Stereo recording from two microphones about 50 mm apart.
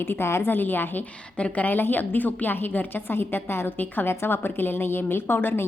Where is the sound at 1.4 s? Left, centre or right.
Left.